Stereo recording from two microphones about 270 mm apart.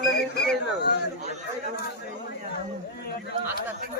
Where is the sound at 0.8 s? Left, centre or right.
Left.